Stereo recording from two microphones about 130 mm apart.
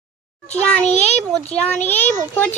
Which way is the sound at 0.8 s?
55° left (ahead or behind).